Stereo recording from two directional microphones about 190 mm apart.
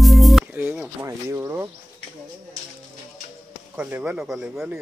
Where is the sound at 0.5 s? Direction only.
10° right (ahead or behind).